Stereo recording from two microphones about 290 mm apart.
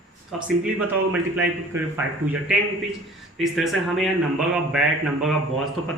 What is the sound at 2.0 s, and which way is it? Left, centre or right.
Speech, right.